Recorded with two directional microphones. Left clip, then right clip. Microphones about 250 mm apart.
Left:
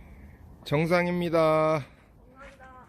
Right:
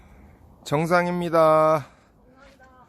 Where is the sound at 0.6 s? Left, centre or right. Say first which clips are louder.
Right 4 dB; centre.